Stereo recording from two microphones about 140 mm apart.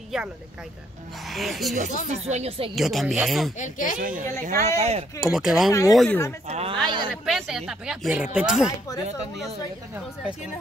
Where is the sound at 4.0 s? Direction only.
75° right (ahead or behind).